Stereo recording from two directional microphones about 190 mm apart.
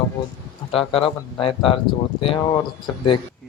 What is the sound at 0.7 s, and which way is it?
Speech, 30° left (ahead or behind).